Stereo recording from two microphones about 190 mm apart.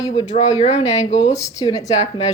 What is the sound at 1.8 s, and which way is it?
Speech, 35° left (ahead or behind).